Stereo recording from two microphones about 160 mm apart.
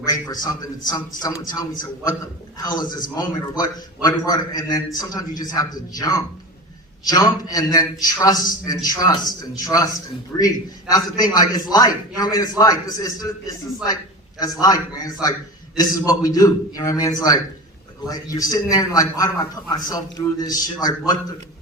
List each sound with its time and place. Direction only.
0.0 s a man's voice: 25° left (ahead or behind)
14.6 s a man's voice: 25° left (ahead or behind)